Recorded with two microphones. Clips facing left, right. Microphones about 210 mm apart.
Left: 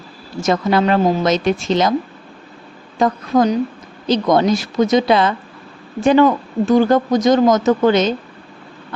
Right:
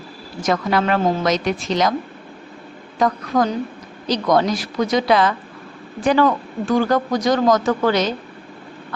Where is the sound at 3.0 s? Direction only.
25° left (ahead or behind).